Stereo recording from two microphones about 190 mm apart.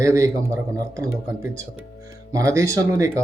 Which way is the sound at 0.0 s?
15° right (ahead or behind).